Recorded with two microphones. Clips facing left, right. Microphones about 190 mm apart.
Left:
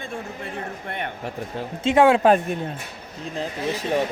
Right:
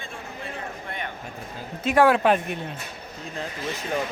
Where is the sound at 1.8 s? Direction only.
25° left (ahead or behind).